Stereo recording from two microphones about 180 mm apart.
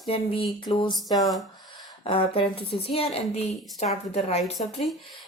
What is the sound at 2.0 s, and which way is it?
A woman's voice, 30° left (ahead or behind).